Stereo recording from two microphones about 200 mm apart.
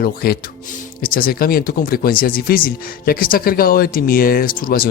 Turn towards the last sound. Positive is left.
turn(degrees=45)  # may be behind; listen again after turning